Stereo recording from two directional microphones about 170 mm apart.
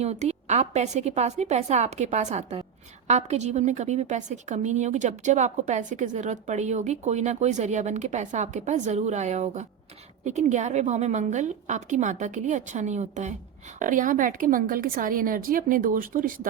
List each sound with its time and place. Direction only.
0.0 s a woman's voice: 40° right (ahead or behind)